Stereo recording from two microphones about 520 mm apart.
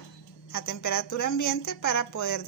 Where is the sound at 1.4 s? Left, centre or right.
Centre.